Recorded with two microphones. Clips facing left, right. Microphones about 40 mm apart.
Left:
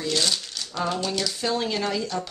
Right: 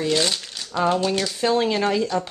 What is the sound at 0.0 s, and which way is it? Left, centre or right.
Speech, right.